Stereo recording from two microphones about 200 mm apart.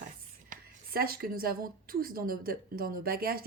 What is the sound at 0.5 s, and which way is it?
A woman's voice, 50° right (ahead or behind).